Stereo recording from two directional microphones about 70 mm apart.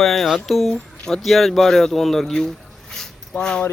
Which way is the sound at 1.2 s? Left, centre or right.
Centre.